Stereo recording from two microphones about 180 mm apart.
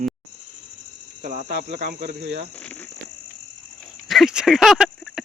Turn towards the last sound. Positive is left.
turn(degrees=0)  # may be behind; listen again after turning